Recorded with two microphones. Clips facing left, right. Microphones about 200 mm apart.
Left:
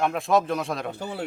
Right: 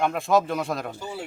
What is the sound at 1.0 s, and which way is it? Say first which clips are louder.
Speech: left 3 dB; 60° left (ahead or behind).